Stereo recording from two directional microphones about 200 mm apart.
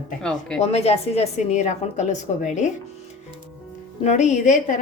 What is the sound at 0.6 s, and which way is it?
A woman's voice, 30° left (ahead or behind).